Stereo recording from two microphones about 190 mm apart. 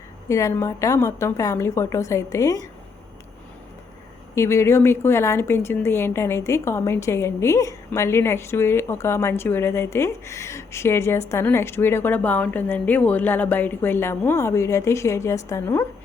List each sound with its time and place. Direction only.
0.3 s a woman's voice: 15° left (ahead or behind)
4.4 s a woman's voice: 15° left (ahead or behind)